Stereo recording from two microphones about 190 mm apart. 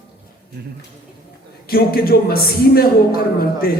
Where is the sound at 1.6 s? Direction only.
55° left (ahead or behind).